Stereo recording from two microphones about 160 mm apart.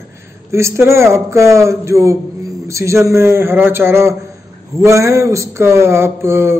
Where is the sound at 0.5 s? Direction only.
15° right (ahead or behind).